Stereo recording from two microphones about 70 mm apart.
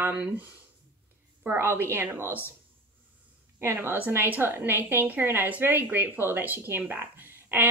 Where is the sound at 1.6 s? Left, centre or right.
Right.